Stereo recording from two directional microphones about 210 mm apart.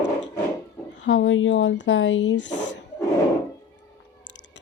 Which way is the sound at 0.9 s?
60° left (ahead or behind).